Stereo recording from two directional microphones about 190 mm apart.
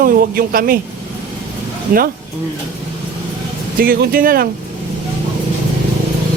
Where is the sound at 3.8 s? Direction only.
50° right (ahead or behind).